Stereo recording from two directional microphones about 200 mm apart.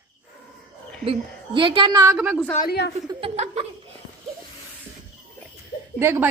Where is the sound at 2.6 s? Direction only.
55° left (ahead or behind).